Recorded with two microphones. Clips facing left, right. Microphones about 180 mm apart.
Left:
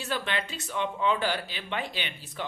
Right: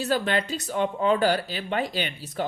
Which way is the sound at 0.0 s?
40° right (ahead or behind).